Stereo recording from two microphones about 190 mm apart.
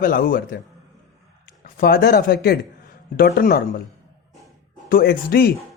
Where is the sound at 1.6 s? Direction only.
50° left (ahead or behind).